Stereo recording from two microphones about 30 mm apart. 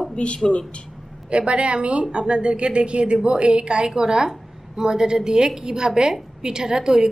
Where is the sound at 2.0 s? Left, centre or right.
Right.